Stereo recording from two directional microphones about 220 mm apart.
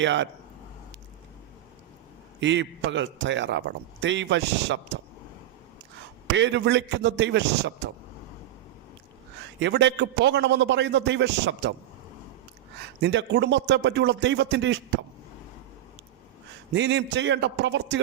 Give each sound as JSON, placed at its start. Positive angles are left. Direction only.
{"t": 0.0, "sound": "a man's voice", "side_deg": -55}
{"t": 2.4, "sound": "a man's voice", "side_deg": -55}
{"t": 6.3, "sound": "a man's voice", "side_deg": -55}
{"t": 9.6, "sound": "a man's voice", "side_deg": -55}
{"t": 13.0, "sound": "a man's voice", "side_deg": -50}
{"t": 16.7, "sound": "a man's voice", "side_deg": -55}